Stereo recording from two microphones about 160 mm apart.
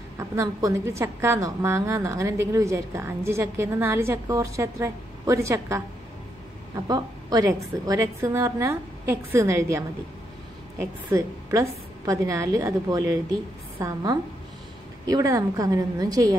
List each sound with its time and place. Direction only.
0.2 s a woman's voice: 20° right (ahead or behind)